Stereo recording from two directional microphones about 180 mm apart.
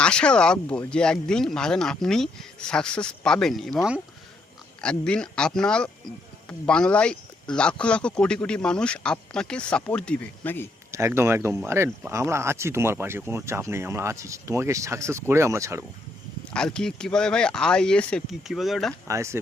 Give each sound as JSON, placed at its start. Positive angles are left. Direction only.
{"t": 0.0, "sound": "speech", "side_deg": 5}
{"t": 4.8, "sound": "speech", "side_deg": 5}
{"t": 10.9, "sound": "speech", "side_deg": -15}
{"t": 16.5, "sound": "speech", "side_deg": 5}
{"t": 19.0, "sound": "speech", "side_deg": -15}